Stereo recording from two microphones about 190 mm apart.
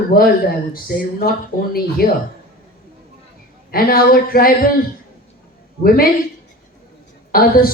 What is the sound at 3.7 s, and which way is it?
Speech, 50° left (ahead or behind).